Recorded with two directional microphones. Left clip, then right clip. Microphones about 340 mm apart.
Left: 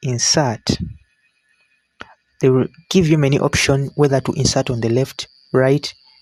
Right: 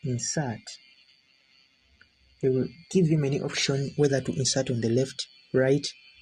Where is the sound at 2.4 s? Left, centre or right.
Left.